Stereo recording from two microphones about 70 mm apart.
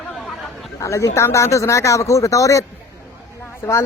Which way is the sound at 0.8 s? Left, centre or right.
Left.